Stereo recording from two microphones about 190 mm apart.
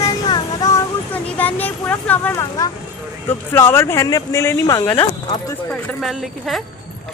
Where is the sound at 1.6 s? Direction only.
10° left (ahead or behind).